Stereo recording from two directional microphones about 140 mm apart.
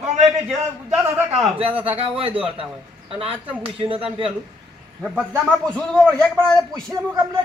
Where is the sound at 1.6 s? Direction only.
40° right (ahead or behind).